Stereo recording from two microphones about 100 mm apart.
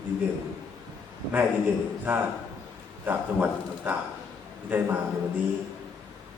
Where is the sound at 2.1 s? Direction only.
15° right (ahead or behind).